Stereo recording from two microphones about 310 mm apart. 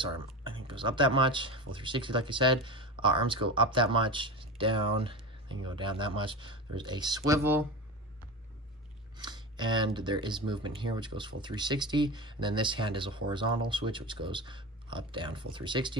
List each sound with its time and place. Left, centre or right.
0.7 s speech: centre
9.1 s speech: centre